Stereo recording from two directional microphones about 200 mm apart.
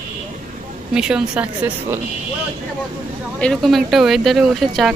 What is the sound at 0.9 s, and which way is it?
Speech, 5° right (ahead or behind).